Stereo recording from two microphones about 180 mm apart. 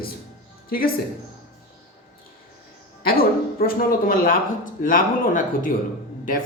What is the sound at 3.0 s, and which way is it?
A woman's voice, 55° left (ahead or behind).